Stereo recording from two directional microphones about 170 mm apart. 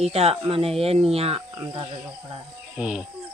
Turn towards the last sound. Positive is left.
turn(degrees=-5)  # may be behind; listen again after turning